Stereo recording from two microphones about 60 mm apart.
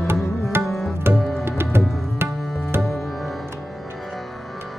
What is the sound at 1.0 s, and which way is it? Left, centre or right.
Tabla, right.